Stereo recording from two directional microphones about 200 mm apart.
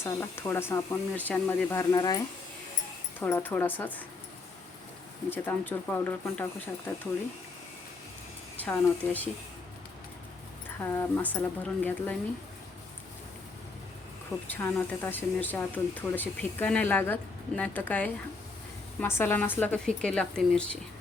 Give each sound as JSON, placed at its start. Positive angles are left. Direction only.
{"t": 0.0, "sound": "speech", "side_deg": 15}
{"t": 5.3, "sound": "speech", "side_deg": 10}
{"t": 8.5, "sound": "speech", "side_deg": 10}
{"t": 10.8, "sound": "speech", "side_deg": 10}
{"t": 14.4, "sound": "speech", "side_deg": 10}